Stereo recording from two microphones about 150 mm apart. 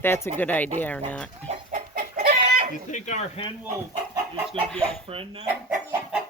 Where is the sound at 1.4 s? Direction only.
45° right (ahead or behind).